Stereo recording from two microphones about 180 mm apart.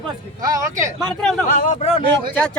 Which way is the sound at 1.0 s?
5° left (ahead or behind).